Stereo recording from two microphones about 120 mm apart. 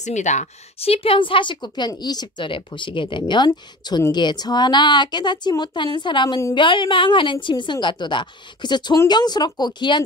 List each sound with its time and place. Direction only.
0.0 s speech: 80° left; by 10.0 s 40° left (ahead or behind)